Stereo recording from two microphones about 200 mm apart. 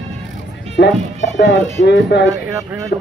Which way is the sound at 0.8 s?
60° left (ahead or behind).